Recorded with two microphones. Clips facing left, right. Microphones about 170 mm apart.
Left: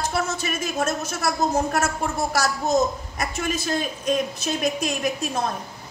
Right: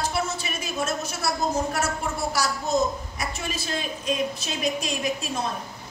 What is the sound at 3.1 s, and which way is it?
Speech, 50° left (ahead or behind).